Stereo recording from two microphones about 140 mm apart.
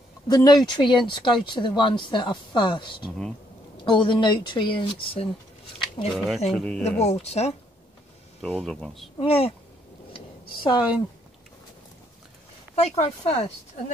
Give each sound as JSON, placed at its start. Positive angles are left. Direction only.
{"t": 0.3, "sound": "speech", "side_deg": 30}
{"t": 6.1, "sound": "speech", "side_deg": 0}
{"t": 7.0, "sound": "speech", "side_deg": 50}
{"t": 8.5, "sound": "speech", "side_deg": 0}
{"t": 9.2, "sound": "speech", "side_deg": 45}
{"t": 10.1, "sound": "a sound", "side_deg": 35}
{"t": 12.7, "sound": "speech", "side_deg": 45}